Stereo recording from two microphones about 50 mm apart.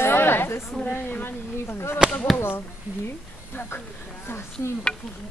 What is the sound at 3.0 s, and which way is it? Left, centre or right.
A woman's voice, left.